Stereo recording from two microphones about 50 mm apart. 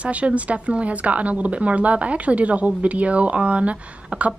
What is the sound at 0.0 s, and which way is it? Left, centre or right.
Speech, right.